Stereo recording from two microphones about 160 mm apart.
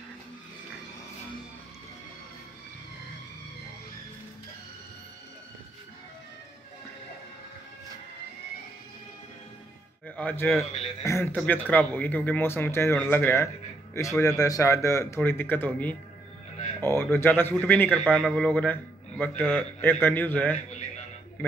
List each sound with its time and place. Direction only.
10.0 s a man's voice: 10° left (ahead or behind)